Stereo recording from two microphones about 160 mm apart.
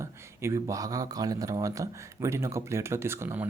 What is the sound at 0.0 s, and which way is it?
Speech, 20° right (ahead or behind).